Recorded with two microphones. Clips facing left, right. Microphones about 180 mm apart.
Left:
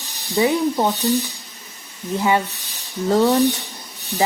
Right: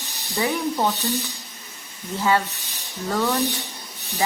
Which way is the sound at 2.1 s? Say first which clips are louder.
Left 2 dB; 20° left (ahead or behind).